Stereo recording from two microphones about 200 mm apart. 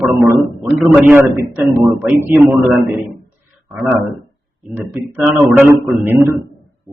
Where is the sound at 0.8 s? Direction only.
5° right (ahead or behind).